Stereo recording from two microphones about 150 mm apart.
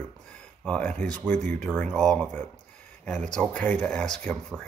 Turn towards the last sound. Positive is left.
turn(degrees=5)  # may be behind; listen again after turning